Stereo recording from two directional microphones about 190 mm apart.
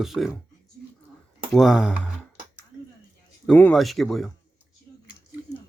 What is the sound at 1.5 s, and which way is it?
Speech, centre (ahead or behind).